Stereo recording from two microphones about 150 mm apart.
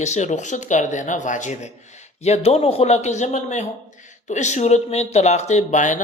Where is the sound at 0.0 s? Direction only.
50° left (ahead or behind).